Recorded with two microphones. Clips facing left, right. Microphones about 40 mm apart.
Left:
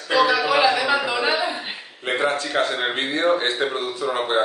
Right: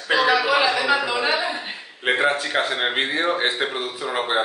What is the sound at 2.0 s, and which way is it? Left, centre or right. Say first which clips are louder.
Speech: right 2 dB; right.